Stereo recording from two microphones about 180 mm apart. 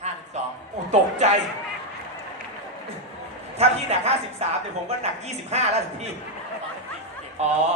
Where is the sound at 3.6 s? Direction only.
35° right (ahead or behind).